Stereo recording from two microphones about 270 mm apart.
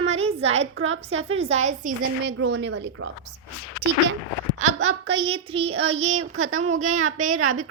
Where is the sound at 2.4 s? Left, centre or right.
Right.